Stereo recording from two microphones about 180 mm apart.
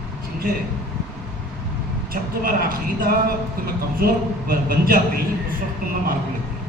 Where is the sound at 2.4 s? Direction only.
55° right (ahead or behind).